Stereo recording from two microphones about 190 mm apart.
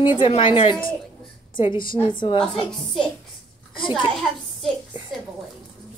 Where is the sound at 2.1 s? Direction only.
30° left (ahead or behind).